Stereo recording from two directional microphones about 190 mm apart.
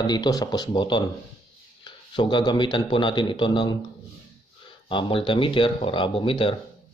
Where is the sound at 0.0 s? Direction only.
20° left (ahead or behind).